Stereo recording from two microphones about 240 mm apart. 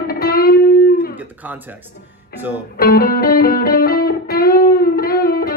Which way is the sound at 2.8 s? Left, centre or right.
Left.